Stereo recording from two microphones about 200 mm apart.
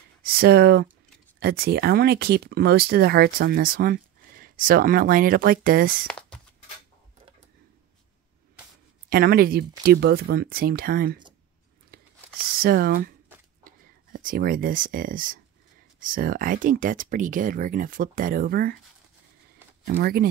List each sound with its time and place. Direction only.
0.2 s speech: 50° right (ahead or behind)
6.0 s walk: 5° left (ahead or behind)
9.1 s speech: 50° right (ahead or behind)
11.9 s a sound: 50° right (ahead or behind)
13.7 s speech: 45° right (ahead or behind)
19.9 s speech: 50° right (ahead or behind)